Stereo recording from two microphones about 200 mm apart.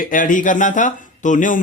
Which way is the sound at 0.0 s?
40° left (ahead or behind).